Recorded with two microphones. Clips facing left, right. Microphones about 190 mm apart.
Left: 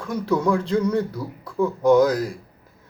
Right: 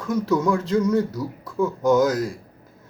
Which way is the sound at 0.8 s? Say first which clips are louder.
Right 2 dB; 30° left (ahead or behind).